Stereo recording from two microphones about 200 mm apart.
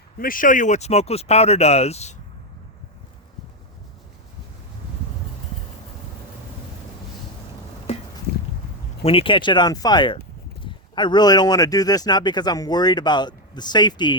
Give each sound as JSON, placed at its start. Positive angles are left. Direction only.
{"t": 0.2, "sound": "speech", "side_deg": 45}
{"t": 9.0, "sound": "speech", "side_deg": 25}